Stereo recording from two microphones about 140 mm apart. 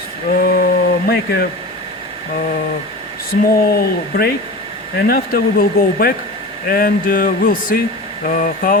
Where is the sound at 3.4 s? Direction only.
90° left.